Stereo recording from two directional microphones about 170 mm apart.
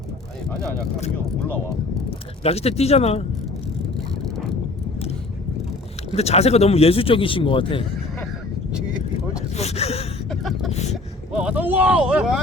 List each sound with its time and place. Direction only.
2.0 s speech: 35° left (ahead or behind)
6.1 s speech: 40° left (ahead or behind)
9.6 s gasp: 40° left (ahead or behind)
10.2 s speech: centre (ahead or behind)
10.7 s speech: 40° left (ahead or behind)
11.3 s speech: 5° right (ahead or behind)